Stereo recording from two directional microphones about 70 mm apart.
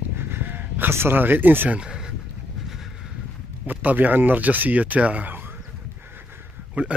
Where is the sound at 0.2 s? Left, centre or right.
Right.